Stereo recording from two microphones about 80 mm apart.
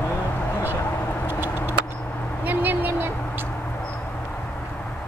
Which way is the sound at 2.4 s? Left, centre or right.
Right.